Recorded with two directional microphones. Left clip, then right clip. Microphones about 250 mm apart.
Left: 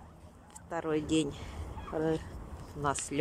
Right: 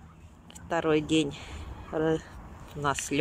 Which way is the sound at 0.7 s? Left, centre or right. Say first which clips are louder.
Right 7 dB; centre.